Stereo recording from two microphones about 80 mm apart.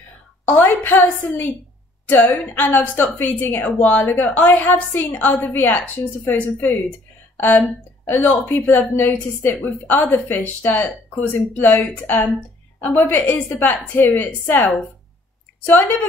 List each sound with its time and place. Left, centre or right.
0.5 s a woman's voice: left